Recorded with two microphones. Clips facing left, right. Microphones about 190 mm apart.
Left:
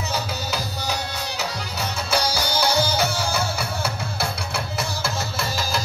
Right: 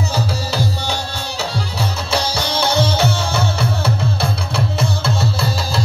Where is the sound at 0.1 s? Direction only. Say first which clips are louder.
Right 5 dB; 30° right (ahead or behind).